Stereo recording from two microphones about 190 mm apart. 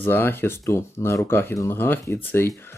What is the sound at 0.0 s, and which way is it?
Speech, 10° left (ahead or behind).